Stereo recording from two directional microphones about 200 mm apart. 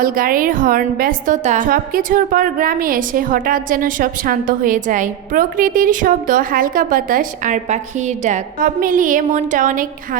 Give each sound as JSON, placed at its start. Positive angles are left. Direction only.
{"t": 0.0, "sound": "a woman's voice", "side_deg": -45}